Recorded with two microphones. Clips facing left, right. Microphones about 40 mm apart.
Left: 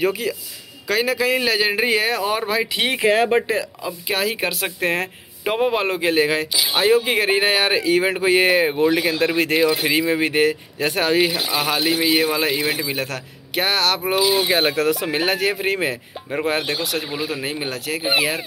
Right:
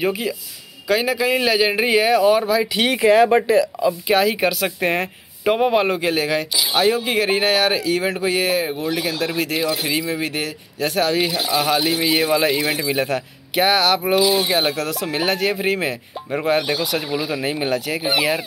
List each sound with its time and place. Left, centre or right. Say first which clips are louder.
0.0 s speech: even; centre
6.0 s speech: left 2 dB; centre
8.8 s speech: left 4 dB; centre